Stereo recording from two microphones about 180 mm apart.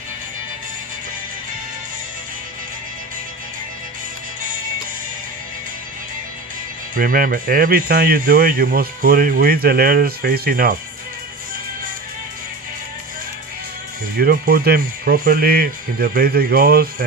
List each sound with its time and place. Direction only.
6.9 s speech: 50° right (ahead or behind)
14.2 s speech: 60° right (ahead or behind)